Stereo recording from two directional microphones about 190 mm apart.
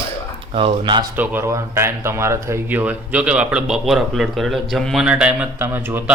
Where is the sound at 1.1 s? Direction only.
10° right (ahead or behind).